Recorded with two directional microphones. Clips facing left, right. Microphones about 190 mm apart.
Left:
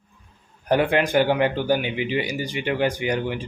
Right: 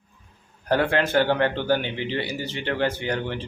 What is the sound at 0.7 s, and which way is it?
Speech, 15° left (ahead or behind).